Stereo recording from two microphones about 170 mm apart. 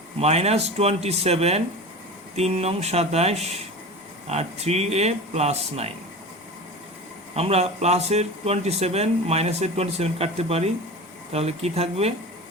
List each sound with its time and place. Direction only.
0.2 s speech: 40° right (ahead or behind)
7.3 s speech: 35° right (ahead or behind)